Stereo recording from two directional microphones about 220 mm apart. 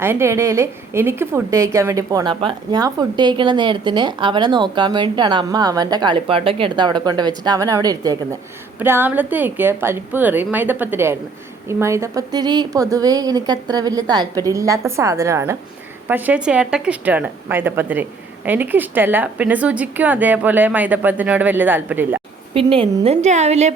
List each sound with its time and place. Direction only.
0.0 s a woman's voice: 10° right (ahead or behind)
22.5 s a woman's voice: 25° right (ahead or behind)